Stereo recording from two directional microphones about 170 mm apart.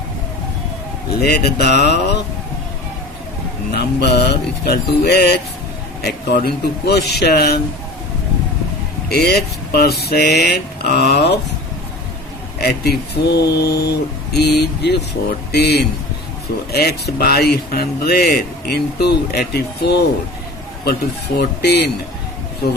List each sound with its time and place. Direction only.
1.2 s speech: 70° left (ahead or behind)
3.8 s speech: 75° left (ahead or behind)
9.0 s speech: 70° left (ahead or behind)
12.5 s speech: 70° left (ahead or behind)
21.3 s speech: 75° left (ahead or behind)